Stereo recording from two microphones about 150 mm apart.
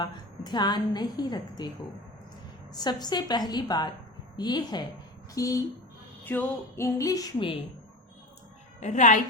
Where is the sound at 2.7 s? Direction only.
25° left (ahead or behind).